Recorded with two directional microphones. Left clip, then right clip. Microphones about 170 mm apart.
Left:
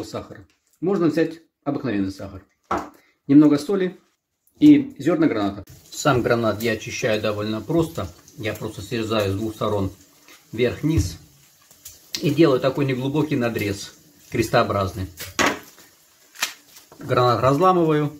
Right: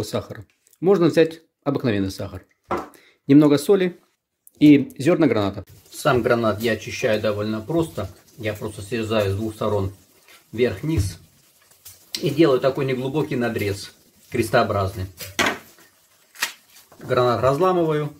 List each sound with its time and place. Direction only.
0.0 s speech: 40° right (ahead or behind)
3.3 s speech: 35° right (ahead or behind)
6.0 s speech: 10° right (ahead or behind)
12.1 s speech: 15° right (ahead or behind)
17.1 s speech: centre (ahead or behind)